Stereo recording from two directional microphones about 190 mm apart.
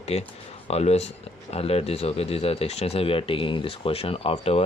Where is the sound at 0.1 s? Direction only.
35° left (ahead or behind).